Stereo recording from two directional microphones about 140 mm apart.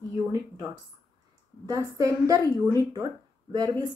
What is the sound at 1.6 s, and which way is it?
Speech, 25° right (ahead or behind).